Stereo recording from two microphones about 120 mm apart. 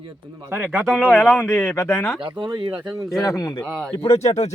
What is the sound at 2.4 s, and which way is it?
Speech, 40° right (ahead or behind).